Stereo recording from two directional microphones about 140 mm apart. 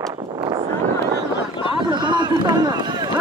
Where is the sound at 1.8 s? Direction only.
35° right (ahead or behind).